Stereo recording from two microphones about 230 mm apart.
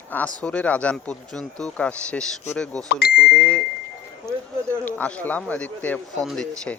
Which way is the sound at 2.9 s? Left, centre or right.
Left.